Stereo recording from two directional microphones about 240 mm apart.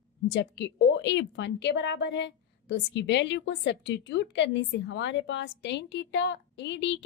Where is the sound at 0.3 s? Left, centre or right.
Left.